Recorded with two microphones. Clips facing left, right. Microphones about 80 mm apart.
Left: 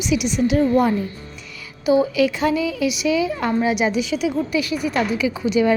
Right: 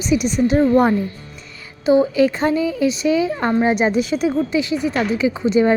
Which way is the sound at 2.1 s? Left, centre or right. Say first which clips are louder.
Right 2 dB; right.